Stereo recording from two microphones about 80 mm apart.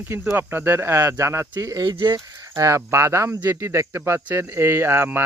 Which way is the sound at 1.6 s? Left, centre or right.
Right.